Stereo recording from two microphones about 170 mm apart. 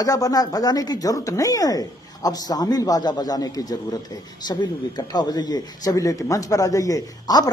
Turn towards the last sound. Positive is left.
turn(degrees=20)  # may be behind; listen again after turning